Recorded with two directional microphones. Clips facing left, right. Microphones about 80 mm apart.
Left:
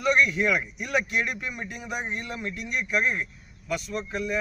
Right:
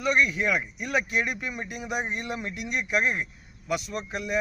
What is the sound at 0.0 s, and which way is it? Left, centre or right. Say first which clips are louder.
Speech: left 2 dB; centre.